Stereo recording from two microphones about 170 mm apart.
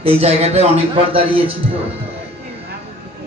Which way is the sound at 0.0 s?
35° right (ahead or behind).